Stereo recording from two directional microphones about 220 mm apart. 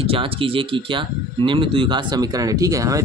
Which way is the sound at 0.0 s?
25° right (ahead or behind).